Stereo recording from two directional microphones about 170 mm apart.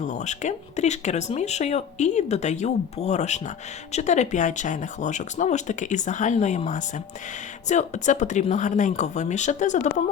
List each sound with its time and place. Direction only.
0.0 s speech: 45° left (ahead or behind)